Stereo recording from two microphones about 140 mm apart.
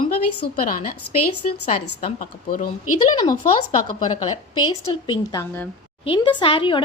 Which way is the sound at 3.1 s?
30° left (ahead or behind).